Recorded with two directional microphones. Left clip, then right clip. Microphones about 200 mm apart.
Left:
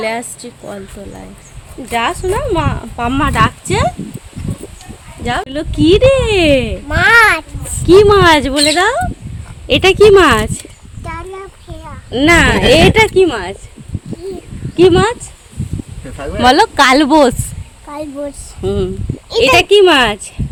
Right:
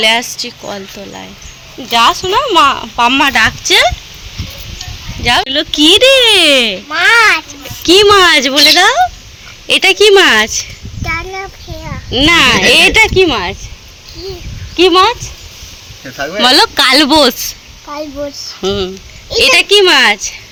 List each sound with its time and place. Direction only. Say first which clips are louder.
0.0 s speech: right 8 dB; centre (ahead or behind)
1.9 s speech: right 6 dB; 5° left (ahead or behind)
5.2 s speech: right 7 dB; 5° left (ahead or behind)
6.8 s speech: left 1 dB; 50° left (ahead or behind)
7.9 s speech: right 1 dB; 5° left (ahead or behind)
11.0 s child singing: right 8 dB; 35° left (ahead or behind)
12.1 s speech: right 2 dB; 15° left (ahead or behind)
14.8 s speech: right 2 dB; 20° left (ahead or behind)
16.4 s speech: even; 10° left (ahead or behind)
18.6 s speech: right 2 dB; 10° left (ahead or behind)
19.4 s speech: right 1 dB; 20° left (ahead or behind)